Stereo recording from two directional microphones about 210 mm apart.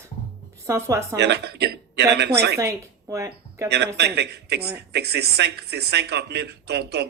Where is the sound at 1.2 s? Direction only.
50° right (ahead or behind).